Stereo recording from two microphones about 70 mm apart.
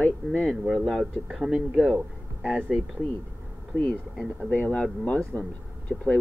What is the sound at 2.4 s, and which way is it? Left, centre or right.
Speech, centre.